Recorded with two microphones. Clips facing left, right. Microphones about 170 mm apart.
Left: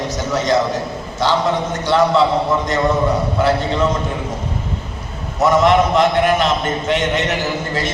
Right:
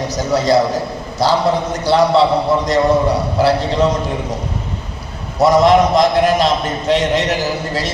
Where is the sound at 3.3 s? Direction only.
35° right (ahead or behind).